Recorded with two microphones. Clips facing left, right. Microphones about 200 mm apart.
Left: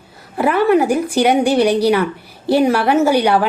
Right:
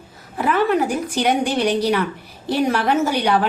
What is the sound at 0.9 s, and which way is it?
A woman's voice, 10° left (ahead or behind).